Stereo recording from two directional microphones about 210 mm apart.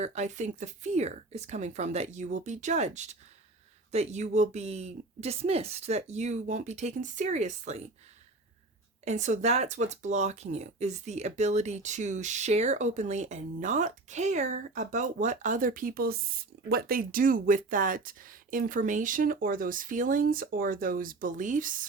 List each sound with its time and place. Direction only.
0.0 s speech: 35° right (ahead or behind)
9.0 s speech: 35° right (ahead or behind)